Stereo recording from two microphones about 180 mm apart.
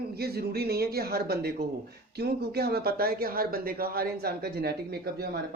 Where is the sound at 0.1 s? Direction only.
60° right (ahead or behind).